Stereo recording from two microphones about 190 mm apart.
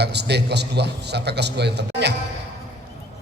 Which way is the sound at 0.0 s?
60° right (ahead or behind).